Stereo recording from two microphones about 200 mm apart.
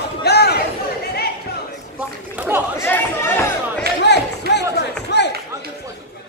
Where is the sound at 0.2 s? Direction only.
55° left (ahead or behind).